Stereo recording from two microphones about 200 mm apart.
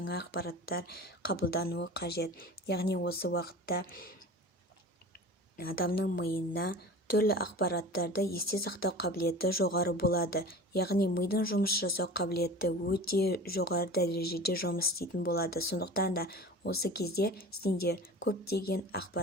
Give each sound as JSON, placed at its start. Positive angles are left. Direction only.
{"t": 0.0, "sound": "a woman's voice", "side_deg": 55}
{"t": 5.5, "sound": "a woman's voice", "side_deg": 50}